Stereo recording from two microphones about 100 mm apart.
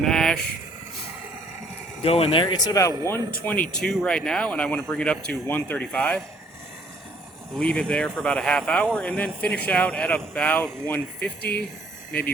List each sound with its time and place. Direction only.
0.0 s vehicle: 5° left (ahead or behind)
2.0 s speech: 75° left (ahead or behind); by 2.9 s 35° left (ahead or behind)
3.4 s speech: 15° left (ahead or behind)
7.6 s speech: 10° left (ahead or behind)